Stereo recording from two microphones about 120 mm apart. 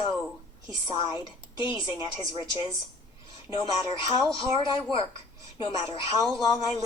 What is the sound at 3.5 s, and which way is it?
A woman's voice, 45° left (ahead or behind).